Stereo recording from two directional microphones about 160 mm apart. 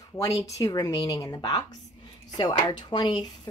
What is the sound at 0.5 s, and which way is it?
A woman's voice, 25° left (ahead or behind).